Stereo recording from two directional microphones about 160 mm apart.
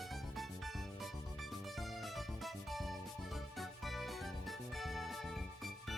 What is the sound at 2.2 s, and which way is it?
Music, centre (ahead or behind).